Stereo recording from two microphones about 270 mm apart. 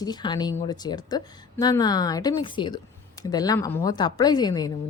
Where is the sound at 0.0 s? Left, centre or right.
Centre.